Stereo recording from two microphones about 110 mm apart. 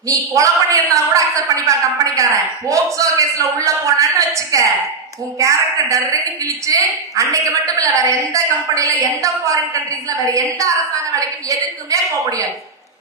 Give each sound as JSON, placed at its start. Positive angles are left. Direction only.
{"t": 0.1, "sound": "a woman's voice", "side_deg": -30}